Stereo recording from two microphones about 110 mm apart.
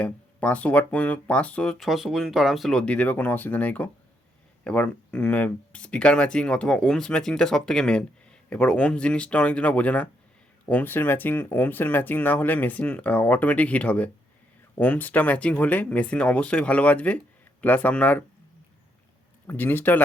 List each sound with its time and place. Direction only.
0.0 s speech: 10° left (ahead or behind)
1.8 s speech: centre (ahead or behind); by 18.3 s 15° left (ahead or behind)
19.5 s speech: 20° left (ahead or behind)